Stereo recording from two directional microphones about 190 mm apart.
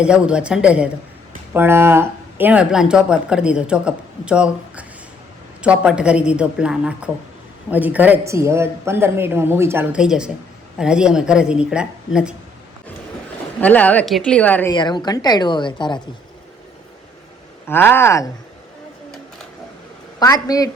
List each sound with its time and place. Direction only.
0.0 s a woman's voice: 5° right (ahead or behind)
13.6 s a woman's voice: 10° left (ahead or behind)
14.7 s a woman's voice: 25° left (ahead or behind)
17.7 s a woman's voice: 10° left (ahead or behind)
20.1 s a woman's voice: 20° left (ahead or behind)